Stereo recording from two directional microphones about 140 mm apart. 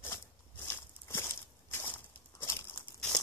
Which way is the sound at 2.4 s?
15° left (ahead or behind).